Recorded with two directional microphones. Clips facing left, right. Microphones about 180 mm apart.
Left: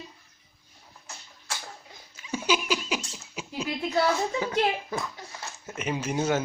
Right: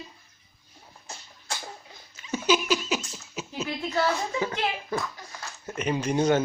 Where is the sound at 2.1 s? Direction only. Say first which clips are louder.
Right 3 dB; 10° left (ahead or behind).